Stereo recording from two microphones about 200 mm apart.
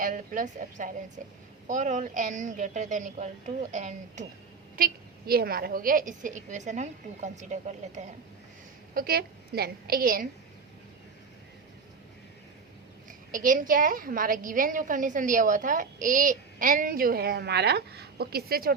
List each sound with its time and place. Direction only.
0.0 s a woman's voice: 40° right (ahead or behind)
4.8 s a woman's voice: 50° right (ahead or behind)
9.0 s a woman's voice: 50° right (ahead or behind)
13.3 s a woman's voice: 40° right (ahead or behind)